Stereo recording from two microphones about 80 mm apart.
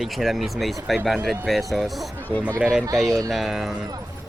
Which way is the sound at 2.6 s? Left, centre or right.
Centre.